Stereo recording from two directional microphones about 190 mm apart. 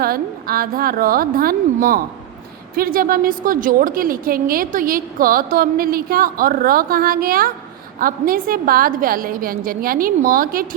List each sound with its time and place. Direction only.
0.0 s a woman's voice: 50° right (ahead or behind)